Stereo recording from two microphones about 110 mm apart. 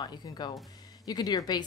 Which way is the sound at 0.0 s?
40° left (ahead or behind).